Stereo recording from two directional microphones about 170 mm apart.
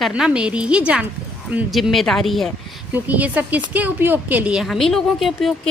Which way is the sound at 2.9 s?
10° right (ahead or behind).